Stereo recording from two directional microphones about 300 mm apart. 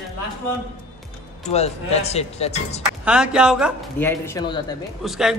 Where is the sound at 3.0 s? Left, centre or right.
Centre.